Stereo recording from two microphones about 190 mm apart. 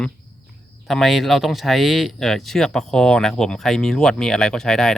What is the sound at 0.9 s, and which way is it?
Speech, centre (ahead or behind).